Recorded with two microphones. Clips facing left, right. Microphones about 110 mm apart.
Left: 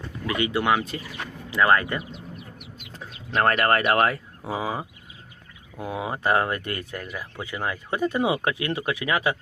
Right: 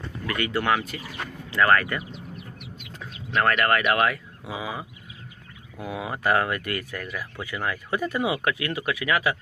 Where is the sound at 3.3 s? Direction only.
35° left (ahead or behind).